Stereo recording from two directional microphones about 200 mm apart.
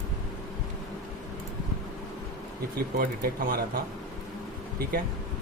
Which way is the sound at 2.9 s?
45° right (ahead or behind).